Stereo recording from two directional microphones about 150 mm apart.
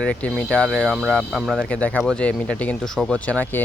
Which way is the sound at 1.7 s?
10° left (ahead or behind).